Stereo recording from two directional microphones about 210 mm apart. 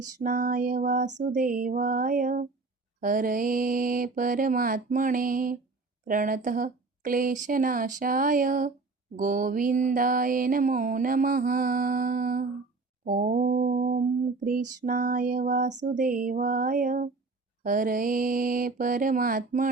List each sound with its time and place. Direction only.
0.2 s mantra: 40° right (ahead or behind)
6.1 s speech: 40° right (ahead or behind)
7.4 s mantra: 40° right (ahead or behind)